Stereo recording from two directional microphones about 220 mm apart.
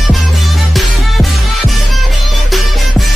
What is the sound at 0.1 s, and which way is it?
Music, centre (ahead or behind).